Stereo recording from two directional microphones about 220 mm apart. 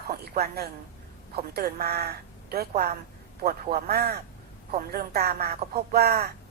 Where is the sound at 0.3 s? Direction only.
45° right (ahead or behind).